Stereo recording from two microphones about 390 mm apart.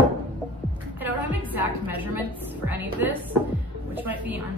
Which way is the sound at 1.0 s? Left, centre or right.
Centre.